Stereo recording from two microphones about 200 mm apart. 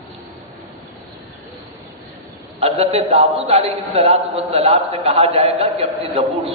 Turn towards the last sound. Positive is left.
turn(degrees=-30)  # may be behind; listen again after turning